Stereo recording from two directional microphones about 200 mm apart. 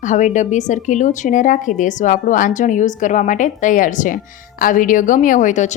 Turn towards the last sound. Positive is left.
turn(degrees=35)  # may be behind; listen again after turning